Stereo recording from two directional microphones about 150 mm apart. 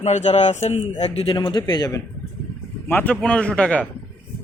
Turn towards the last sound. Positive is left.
turn(degrees=5)  # may be behind; listen again after turning